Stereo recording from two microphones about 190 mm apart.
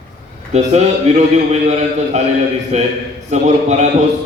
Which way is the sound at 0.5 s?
35° right (ahead or behind).